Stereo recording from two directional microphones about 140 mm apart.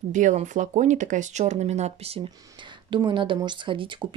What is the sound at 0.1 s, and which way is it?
Speech, 60° right (ahead or behind).